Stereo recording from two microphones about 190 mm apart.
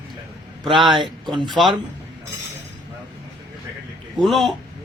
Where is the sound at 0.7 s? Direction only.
25° right (ahead or behind).